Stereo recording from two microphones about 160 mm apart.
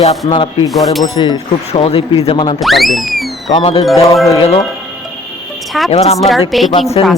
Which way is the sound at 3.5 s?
35° left (ahead or behind).